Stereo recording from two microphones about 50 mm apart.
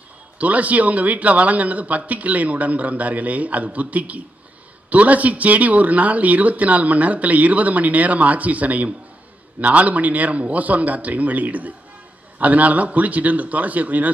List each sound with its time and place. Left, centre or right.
0.4 s speech: right